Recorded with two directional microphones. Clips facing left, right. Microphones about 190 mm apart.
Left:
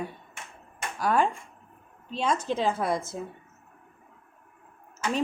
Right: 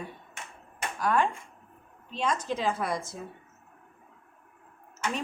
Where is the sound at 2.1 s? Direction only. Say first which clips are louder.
Left 3 dB; 30° left (ahead or behind).